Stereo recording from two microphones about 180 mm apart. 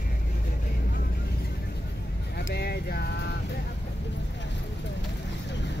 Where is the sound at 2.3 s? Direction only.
65° left (ahead or behind).